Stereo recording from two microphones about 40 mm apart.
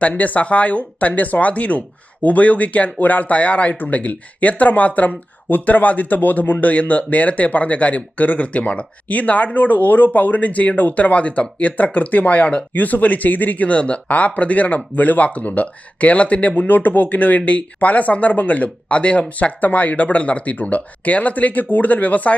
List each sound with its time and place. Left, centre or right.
0.0 s speech: left